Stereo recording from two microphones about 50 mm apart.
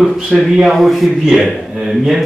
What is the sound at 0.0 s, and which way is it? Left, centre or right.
A man's voice, centre.